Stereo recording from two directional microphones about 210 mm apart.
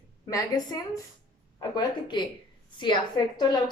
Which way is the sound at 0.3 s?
15° left (ahead or behind).